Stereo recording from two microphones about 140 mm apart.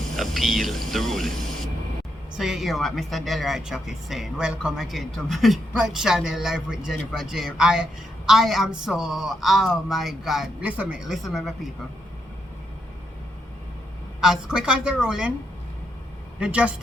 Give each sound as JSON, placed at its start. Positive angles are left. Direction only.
{"t": 0.2, "sound": "speech", "side_deg": 0}
{"t": 14.2, "sound": "a woman's voice", "side_deg": -5}
{"t": 16.4, "sound": "a woman's voice", "side_deg": -10}